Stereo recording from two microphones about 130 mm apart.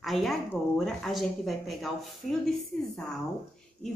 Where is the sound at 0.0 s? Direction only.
Centre (ahead or behind).